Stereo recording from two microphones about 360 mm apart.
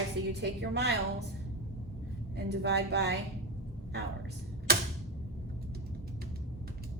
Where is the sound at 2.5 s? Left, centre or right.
Right.